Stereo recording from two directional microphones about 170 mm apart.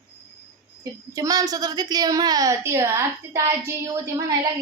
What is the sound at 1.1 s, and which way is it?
A woman's voice, 20° right (ahead or behind).